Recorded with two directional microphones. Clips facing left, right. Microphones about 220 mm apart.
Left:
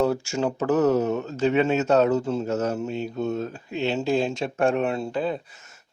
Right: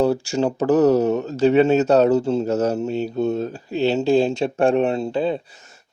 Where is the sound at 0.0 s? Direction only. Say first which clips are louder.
Right 4 dB; 35° right (ahead or behind).